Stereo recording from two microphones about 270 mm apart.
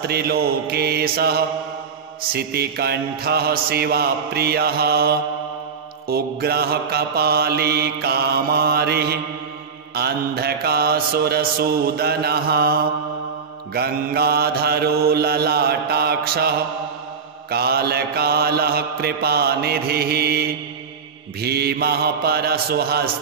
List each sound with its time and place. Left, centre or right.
0.0 s mantra: right
13.7 s mantra: right